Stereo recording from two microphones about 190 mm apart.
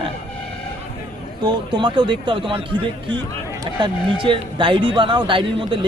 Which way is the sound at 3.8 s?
25° right (ahead or behind).